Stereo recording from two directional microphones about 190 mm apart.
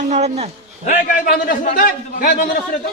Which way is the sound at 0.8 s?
45° left (ahead or behind).